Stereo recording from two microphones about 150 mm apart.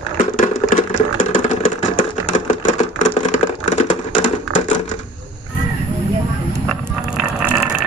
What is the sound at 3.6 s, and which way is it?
Typing, 50° left (ahead or behind).